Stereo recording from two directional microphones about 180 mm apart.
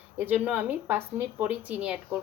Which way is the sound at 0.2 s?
10° right (ahead or behind).